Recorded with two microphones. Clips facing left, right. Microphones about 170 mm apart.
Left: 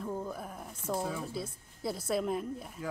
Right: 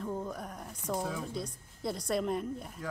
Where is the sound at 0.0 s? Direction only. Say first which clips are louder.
Even; centre (ahead or behind).